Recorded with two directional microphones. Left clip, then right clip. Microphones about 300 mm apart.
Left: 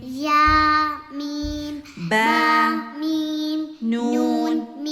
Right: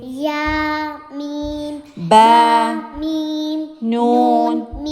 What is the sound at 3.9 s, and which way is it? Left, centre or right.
Music, centre.